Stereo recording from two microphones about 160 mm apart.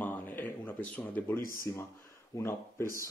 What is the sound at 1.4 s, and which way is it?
Speech, 60° left (ahead or behind).